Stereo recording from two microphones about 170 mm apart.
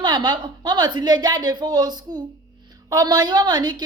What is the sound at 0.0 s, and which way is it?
A woman's voice, 25° right (ahead or behind).